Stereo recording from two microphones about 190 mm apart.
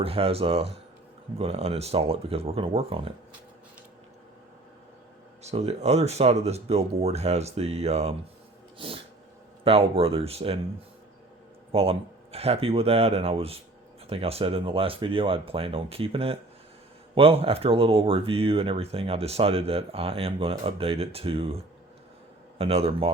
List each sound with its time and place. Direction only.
0.0 s speech: 30° right (ahead or behind)
5.4 s speech: 35° right (ahead or behind)
9.6 s speech: 30° right (ahead or behind)
11.7 s speech: 30° right (ahead or behind)